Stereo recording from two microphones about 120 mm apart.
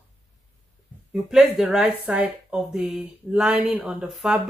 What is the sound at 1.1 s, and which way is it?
Speech, 5° right (ahead or behind).